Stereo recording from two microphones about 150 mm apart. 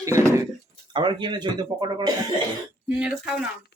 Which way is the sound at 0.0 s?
20° right (ahead or behind).